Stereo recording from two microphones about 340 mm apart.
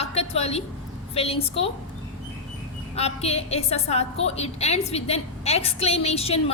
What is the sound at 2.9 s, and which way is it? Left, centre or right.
A woman's voice, centre.